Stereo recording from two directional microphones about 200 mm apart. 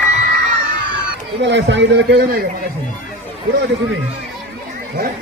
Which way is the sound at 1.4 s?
60° right (ahead or behind).